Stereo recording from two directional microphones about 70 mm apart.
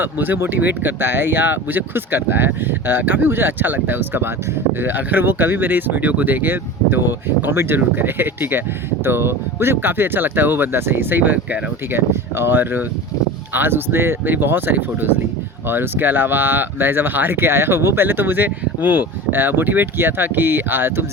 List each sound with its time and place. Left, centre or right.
0.0 s speech: right